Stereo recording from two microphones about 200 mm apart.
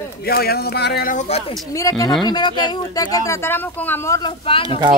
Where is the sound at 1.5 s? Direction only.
15° left (ahead or behind).